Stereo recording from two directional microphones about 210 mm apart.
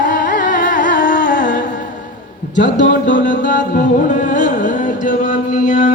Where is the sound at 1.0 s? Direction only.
40° left (ahead or behind).